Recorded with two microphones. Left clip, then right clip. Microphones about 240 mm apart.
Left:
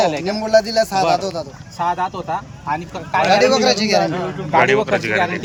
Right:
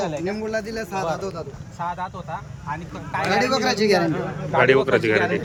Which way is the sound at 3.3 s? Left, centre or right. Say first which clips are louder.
Left 6 dB; centre.